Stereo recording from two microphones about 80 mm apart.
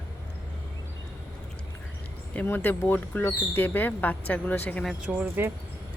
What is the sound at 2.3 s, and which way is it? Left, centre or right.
Speech, left.